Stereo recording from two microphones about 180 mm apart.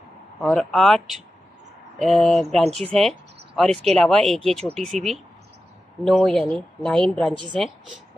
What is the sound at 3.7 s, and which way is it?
Speech, 35° right (ahead or behind).